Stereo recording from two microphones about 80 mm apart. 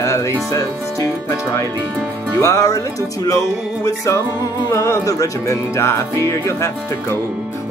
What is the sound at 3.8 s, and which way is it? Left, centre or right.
Music, left.